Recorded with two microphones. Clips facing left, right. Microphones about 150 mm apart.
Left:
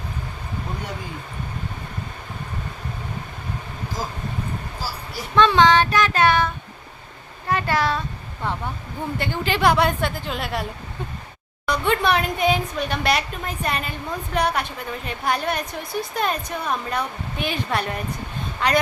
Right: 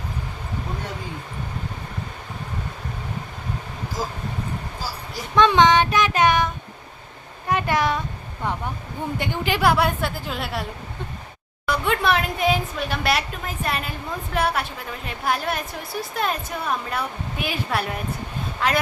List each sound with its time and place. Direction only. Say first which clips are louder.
5.3 s child singing: even; 15° right (ahead or behind)
9.1 s a woman's voice: even; 15° right (ahead or behind)